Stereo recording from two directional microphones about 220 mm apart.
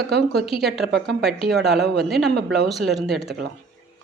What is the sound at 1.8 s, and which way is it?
Speech, 50° right (ahead or behind).